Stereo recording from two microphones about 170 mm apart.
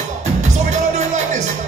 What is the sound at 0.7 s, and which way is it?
Music, 45° right (ahead or behind).